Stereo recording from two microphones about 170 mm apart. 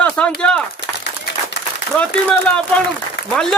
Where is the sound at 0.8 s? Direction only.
90° left.